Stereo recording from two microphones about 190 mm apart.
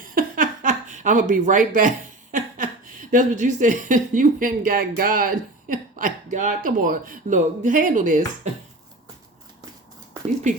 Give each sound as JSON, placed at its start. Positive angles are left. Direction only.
{"t": 0.0, "sound": "a sound", "side_deg": -50}
{"t": 2.3, "sound": "a woman's voice", "side_deg": -45}
{"t": 10.5, "sound": "speech", "side_deg": -40}